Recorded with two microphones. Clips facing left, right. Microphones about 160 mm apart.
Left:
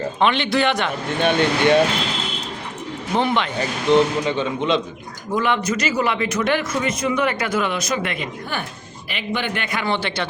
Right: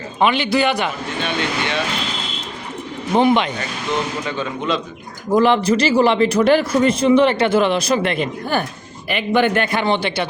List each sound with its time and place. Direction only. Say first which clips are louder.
0.2 s a man's voice: right 3 dB; 5° right (ahead or behind)
1.2 s speech: left 6 dB; 50° left (ahead or behind)
3.2 s speech: right 6 dB; 15° right (ahead or behind)
3.9 s speech: left 8 dB; 30° left (ahead or behind)
5.3 s speech: right 7 dB; 35° right (ahead or behind)
9.0 s a man's voice: right 9 dB; 50° right (ahead or behind)
9.7 s a man's voice: right 4 dB; 20° right (ahead or behind)